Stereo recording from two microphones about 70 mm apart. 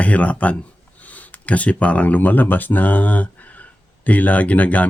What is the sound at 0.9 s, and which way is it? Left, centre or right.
Speech, left.